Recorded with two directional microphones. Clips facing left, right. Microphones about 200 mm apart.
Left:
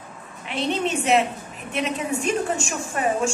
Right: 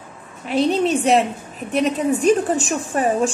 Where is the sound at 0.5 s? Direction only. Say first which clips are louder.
Right 7 dB; 40° right (ahead or behind).